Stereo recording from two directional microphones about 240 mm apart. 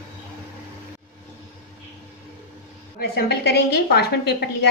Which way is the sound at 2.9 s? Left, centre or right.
Left.